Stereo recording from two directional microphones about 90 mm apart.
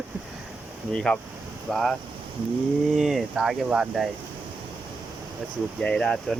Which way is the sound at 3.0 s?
5° right (ahead or behind).